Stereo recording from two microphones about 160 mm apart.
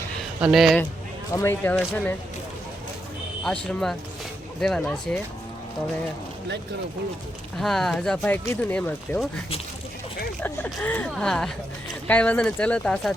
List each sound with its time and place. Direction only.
0.2 s a sound: centre (ahead or behind)
1.3 s speech: 15° left (ahead or behind)
3.4 s speech: 5° left (ahead or behind)
7.6 s speech: centre (ahead or behind)
10.4 s speech: 10° left (ahead or behind)